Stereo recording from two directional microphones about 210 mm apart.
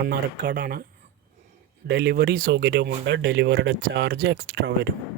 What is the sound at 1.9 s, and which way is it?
Speech, 50° right (ahead or behind).